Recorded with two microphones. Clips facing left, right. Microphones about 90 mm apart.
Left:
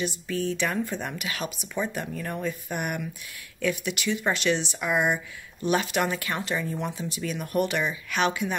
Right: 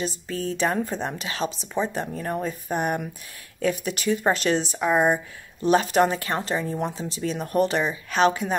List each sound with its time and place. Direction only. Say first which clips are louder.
0.0 s a woman's voice: even; 35° right (ahead or behind)